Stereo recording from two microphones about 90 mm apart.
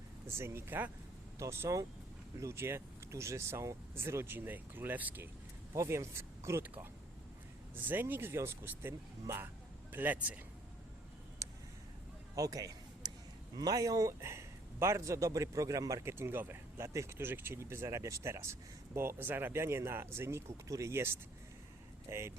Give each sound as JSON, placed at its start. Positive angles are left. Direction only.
{"t": 0.3, "sound": "a man's voice", "side_deg": -30}
{"t": 5.7, "sound": "speech", "side_deg": -35}
{"t": 7.8, "sound": "speech", "side_deg": -20}
{"t": 11.4, "sound": "a sound", "side_deg": -35}
{"t": 13.6, "sound": "a man's voice", "side_deg": -45}